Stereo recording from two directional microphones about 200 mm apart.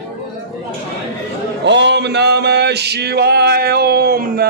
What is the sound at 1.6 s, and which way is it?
Male singing, 60° right (ahead or behind).